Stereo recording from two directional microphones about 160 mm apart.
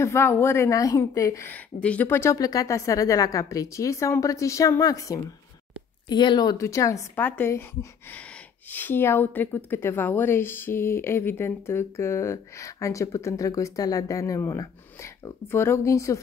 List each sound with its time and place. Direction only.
0.0 s a woman's voice: 15° left (ahead or behind)
8.7 s speech: 15° left (ahead or behind)